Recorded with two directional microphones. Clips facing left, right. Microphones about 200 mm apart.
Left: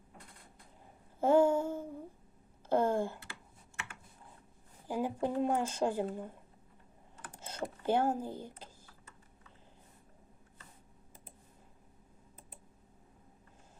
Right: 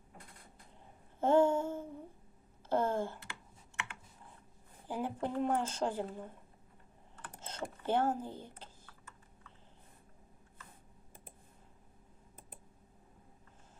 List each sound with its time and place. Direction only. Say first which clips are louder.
1.2 s a sound: left 1 dB; 10° left (ahead or behind)
4.9 s speech: left 3 dB; 10° left (ahead or behind)
7.4 s speech: left 3 dB; 10° left (ahead or behind)